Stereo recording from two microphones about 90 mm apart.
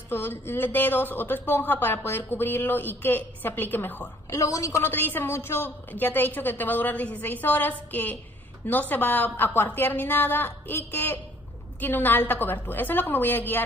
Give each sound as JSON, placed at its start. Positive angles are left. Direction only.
{"t": 0.1, "sound": "speech", "side_deg": 25}
{"t": 4.4, "sound": "a woman's voice", "side_deg": 35}
{"t": 4.8, "sound": "speech", "side_deg": 20}